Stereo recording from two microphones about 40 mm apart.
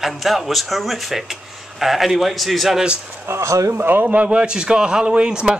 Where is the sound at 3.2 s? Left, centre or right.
Right.